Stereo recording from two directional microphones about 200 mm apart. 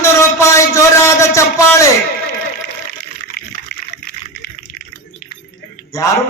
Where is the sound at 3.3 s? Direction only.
45° left (ahead or behind).